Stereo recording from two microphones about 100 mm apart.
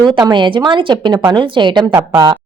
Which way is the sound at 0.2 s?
50° right (ahead or behind).